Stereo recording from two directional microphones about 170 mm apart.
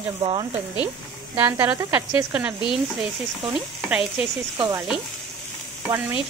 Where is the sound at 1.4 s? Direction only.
15° right (ahead or behind).